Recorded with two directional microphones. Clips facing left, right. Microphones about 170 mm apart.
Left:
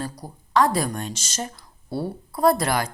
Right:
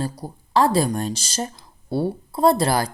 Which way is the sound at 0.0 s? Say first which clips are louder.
Right 4 dB; 30° right (ahead or behind).